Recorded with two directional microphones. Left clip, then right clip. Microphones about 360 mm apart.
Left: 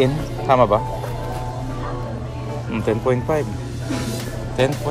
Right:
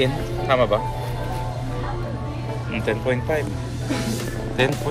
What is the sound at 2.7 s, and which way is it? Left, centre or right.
Speech, centre.